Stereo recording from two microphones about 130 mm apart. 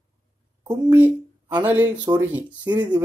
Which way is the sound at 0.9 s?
15° right (ahead or behind).